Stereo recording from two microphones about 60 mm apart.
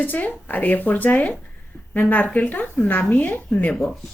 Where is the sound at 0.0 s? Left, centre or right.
Left.